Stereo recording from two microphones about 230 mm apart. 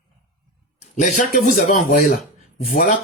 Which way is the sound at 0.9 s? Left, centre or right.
Left.